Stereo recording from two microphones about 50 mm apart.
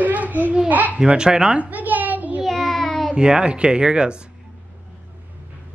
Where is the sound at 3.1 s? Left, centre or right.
Centre.